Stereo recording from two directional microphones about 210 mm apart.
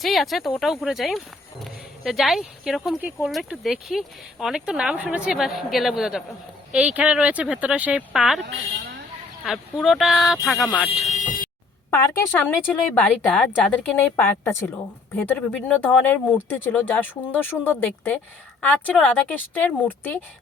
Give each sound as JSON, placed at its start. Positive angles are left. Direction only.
{"t": 0.0, "sound": "speech", "side_deg": 0}
{"t": 8.4, "sound": "speech", "side_deg": -55}
{"t": 9.4, "sound": "speech", "side_deg": 0}
{"t": 11.1, "sound": "a sound", "side_deg": 35}
{"t": 11.9, "sound": "speech", "side_deg": 10}